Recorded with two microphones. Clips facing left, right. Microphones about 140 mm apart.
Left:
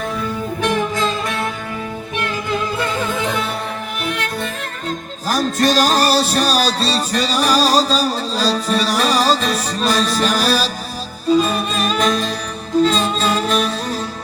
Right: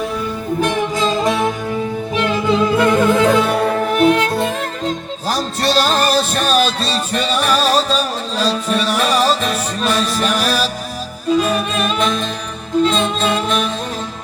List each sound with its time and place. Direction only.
2.7 s music: 80° right; by 4.4 s 45° right (ahead or behind)
5.5 s music: 45° left (ahead or behind)